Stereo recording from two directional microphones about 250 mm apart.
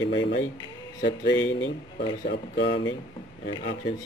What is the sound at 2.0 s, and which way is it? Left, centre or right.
Speech, centre.